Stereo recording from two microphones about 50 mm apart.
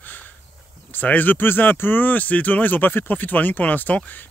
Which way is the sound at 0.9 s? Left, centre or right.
Left.